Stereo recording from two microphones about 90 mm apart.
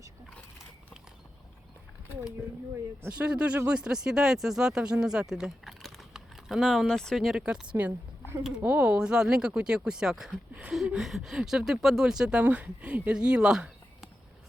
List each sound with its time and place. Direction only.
3.2 s speech: 10° right (ahead or behind)
7.4 s speech: 10° right (ahead or behind)
10.5 s speech: 15° right (ahead or behind)
10.8 s speech: 5° right (ahead or behind)